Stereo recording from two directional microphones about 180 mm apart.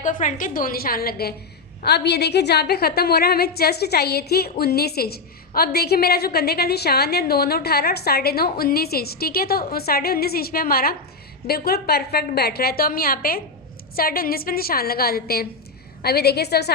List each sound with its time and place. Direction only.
0.0 s a woman's voice: 45° left (ahead or behind); by 16.7 s 65° left (ahead or behind)